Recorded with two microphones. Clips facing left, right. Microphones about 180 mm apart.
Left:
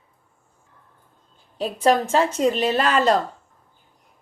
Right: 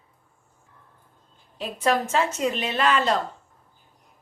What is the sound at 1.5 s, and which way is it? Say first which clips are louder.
A woman's voice: left 5 dB; 30° left (ahead or behind).